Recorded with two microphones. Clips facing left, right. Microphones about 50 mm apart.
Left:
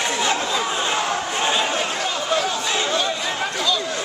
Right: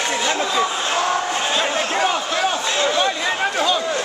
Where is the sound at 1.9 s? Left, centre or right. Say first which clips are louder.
Right 3 dB; right.